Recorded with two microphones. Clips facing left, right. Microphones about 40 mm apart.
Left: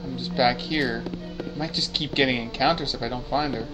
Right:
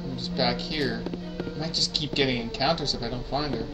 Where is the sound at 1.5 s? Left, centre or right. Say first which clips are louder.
Left 3 dB; left.